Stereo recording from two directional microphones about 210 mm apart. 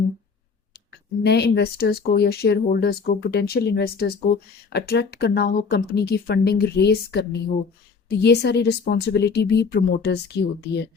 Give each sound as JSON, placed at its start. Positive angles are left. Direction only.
{"t": 1.2, "sound": "speech", "side_deg": 50}